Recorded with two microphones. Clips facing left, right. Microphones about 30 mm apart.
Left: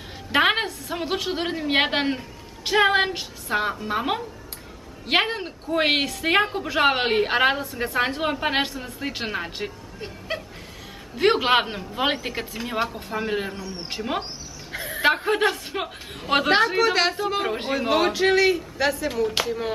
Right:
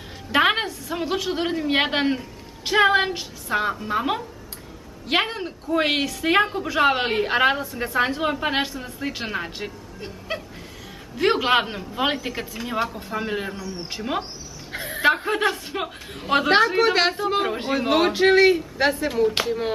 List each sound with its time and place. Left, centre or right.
0.3 s a woman's voice: centre
13.6 s speech: left
13.8 s a woman's voice: centre
14.7 s a sound: centre
15.0 s a woman's voice: centre